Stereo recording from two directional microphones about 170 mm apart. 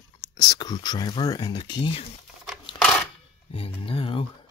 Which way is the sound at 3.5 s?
35° left (ahead or behind).